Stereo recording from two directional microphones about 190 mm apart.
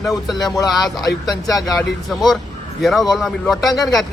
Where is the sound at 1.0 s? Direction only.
20° left (ahead or behind).